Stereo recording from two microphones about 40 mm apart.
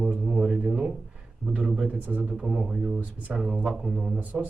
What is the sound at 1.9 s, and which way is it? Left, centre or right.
Speech, right.